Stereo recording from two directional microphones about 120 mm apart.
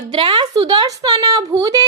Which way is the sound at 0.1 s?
45° right (ahead or behind).